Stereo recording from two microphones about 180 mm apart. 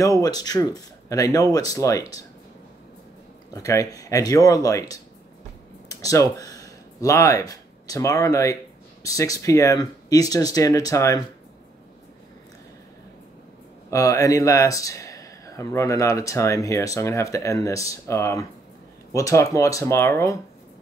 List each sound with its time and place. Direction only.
0.2 s speech: 20° left (ahead or behind)
3.5 s speech: 20° left (ahead or behind)
5.9 s a sound: 20° left (ahead or behind)
6.3 s speech: 20° left (ahead or behind)
13.8 s speech: 15° left (ahead or behind)